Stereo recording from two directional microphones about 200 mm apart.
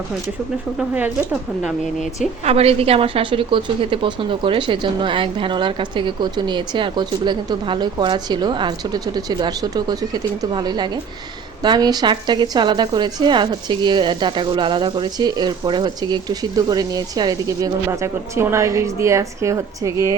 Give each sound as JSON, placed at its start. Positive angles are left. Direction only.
{"t": 0.8, "sound": "speech", "side_deg": -5}
{"t": 2.4, "sound": "a woman's voice", "side_deg": -30}